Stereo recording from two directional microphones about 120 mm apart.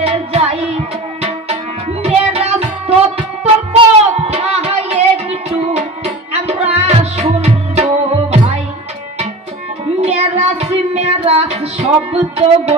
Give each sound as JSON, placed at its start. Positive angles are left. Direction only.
{"t": 0.0, "sound": "music", "side_deg": -55}
{"t": 1.2, "sound": "tabla", "side_deg": -60}
{"t": 3.7, "sound": "music", "side_deg": -55}
{"t": 9.9, "sound": "child singing", "side_deg": -65}
{"t": 11.2, "sound": "music", "side_deg": -65}